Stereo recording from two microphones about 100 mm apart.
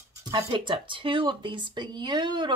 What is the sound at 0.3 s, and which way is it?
Speech, 55° right (ahead or behind).